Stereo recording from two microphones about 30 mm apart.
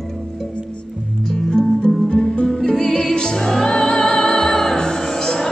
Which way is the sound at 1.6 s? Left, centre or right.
Left.